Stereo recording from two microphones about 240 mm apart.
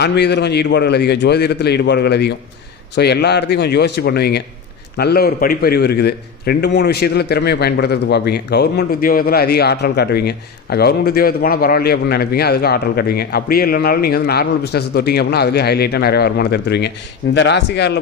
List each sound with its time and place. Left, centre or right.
0.0 s a man's voice: left